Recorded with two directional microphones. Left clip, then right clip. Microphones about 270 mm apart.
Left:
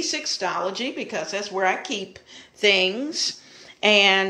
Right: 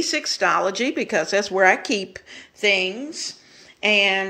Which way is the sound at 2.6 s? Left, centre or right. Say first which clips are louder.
Left 1 dB; centre.